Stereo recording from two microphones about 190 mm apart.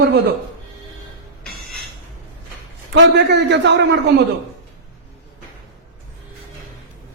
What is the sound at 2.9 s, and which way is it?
Speech, 70° right (ahead or behind).